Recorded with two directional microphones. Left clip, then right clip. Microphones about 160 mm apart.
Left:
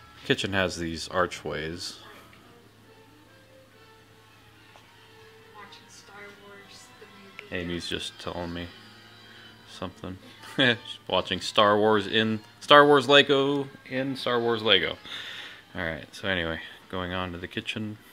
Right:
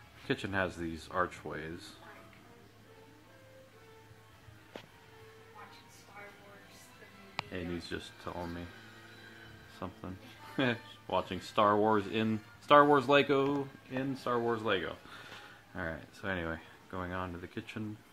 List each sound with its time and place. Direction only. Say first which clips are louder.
0.3 s speech: left 8 dB; 20° left (ahead or behind)
7.5 s speech: left 13 dB; 15° left (ahead or behind)
9.8 s speech: left 7 dB; 10° left (ahead or behind)